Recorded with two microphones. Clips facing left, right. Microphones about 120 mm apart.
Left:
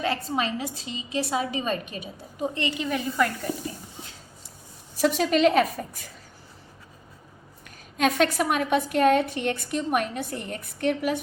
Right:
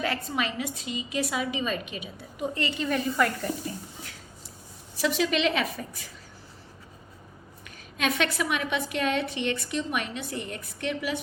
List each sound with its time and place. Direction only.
0.0 s a woman's voice: 30° left (ahead or behind)
2.6 s a woman's voice: 15° left (ahead or behind)
3.2 s speech: centre (ahead or behind)
4.9 s a woman's voice: 45° left (ahead or behind)
7.9 s a woman's voice: 40° left (ahead or behind)